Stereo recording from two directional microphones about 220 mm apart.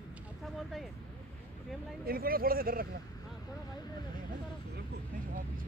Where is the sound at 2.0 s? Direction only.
40° right (ahead or behind).